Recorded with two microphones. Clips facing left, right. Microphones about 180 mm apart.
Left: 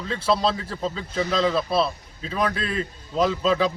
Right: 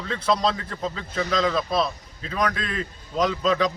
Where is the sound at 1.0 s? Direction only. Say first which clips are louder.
Left 1 dB; 5° left (ahead or behind).